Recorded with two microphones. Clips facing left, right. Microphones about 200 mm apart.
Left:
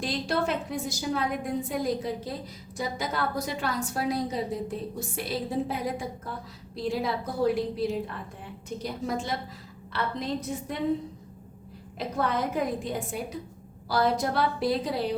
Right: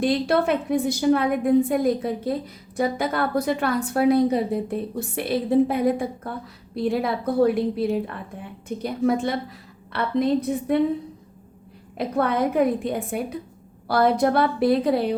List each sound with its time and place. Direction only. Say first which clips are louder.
0.0 s a woman's voice: right 8 dB; 60° right (ahead or behind)
11.9 s a woman's voice: right 6 dB; 60° right (ahead or behind)